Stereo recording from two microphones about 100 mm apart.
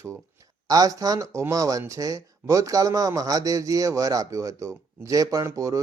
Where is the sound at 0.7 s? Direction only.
40° right (ahead or behind).